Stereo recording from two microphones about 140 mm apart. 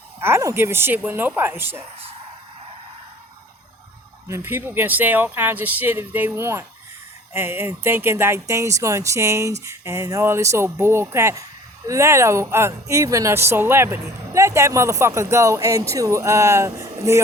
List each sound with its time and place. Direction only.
0.2 s speech: 20° right (ahead or behind)
4.3 s speech: 15° right (ahead or behind)